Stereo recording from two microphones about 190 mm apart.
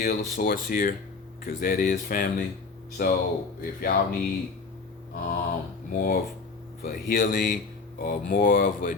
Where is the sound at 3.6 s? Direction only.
50° left (ahead or behind).